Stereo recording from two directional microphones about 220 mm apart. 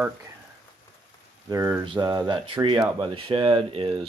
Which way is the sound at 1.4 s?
15° right (ahead or behind).